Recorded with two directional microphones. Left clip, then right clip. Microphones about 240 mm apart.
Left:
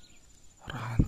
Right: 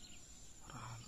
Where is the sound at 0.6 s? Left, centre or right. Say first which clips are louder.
Left 13 dB; left.